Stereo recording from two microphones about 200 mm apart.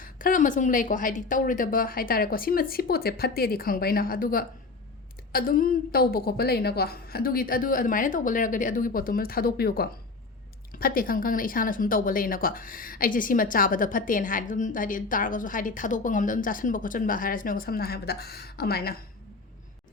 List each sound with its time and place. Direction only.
0.0 s speech: 45° left (ahead or behind)